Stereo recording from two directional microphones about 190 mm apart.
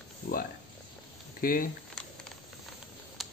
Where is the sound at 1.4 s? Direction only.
50° left (ahead or behind).